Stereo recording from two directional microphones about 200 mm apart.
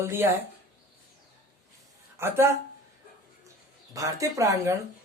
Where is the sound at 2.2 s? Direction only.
10° right (ahead or behind).